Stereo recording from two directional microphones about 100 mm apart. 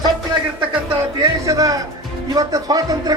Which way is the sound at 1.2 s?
35° right (ahead or behind).